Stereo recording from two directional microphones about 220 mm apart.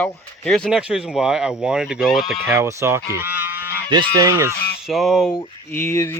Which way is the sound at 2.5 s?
15° right (ahead or behind).